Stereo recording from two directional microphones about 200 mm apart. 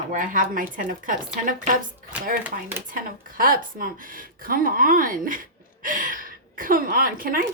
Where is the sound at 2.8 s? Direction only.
45° right (ahead or behind).